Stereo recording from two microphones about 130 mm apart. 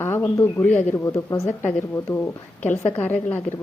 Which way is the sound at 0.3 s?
15° left (ahead or behind).